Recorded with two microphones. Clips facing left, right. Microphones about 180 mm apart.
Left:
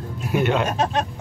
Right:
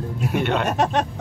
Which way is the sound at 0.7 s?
75° right (ahead or behind).